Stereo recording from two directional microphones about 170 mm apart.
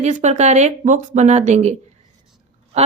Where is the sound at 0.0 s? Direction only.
45° right (ahead or behind).